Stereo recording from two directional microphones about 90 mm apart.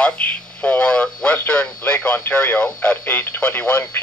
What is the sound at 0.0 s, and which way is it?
Speech, 20° left (ahead or behind).